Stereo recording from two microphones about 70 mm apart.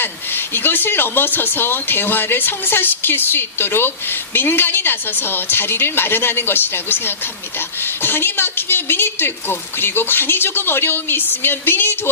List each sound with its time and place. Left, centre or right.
0.0 s speech: left